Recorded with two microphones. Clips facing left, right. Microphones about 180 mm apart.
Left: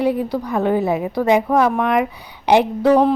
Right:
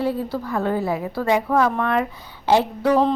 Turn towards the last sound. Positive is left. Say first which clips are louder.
# left 4 dB
turn(degrees=15)  # may be behind; listen again after turning